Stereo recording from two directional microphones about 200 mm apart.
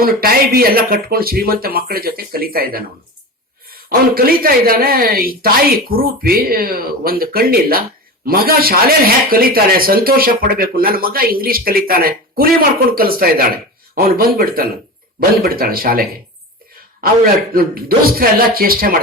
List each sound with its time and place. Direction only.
0.0 s speech: 50° right (ahead or behind)